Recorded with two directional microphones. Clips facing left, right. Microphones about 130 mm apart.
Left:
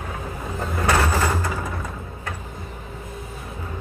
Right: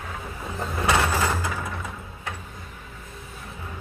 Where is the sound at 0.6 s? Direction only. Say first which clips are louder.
Left 2 dB; centre (ahead or behind).